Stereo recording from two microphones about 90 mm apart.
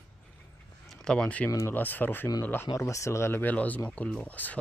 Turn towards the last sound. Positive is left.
turn(degrees=20)  # may be behind; listen again after turning